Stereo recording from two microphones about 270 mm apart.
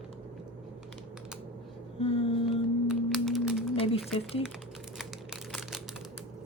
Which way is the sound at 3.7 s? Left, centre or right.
Left.